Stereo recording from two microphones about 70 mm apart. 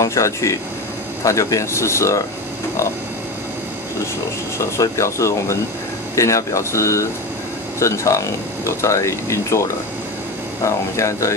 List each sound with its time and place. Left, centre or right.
0.0 s speech: left
4.6 s speech: left